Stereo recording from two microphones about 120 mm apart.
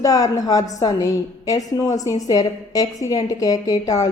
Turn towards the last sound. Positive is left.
turn(degrees=30)  # may be behind; listen again after turning